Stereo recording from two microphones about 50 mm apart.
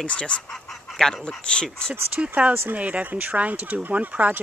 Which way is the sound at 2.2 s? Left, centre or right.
Right.